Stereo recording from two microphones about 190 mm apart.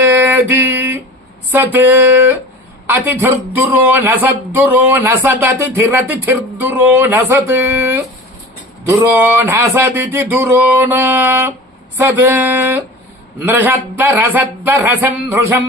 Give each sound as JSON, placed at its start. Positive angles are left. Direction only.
{"t": 0.0, "sound": "a sound", "side_deg": -10}
{"t": 1.5, "sound": "speech", "side_deg": -10}
{"t": 9.1, "sound": "speech", "side_deg": -10}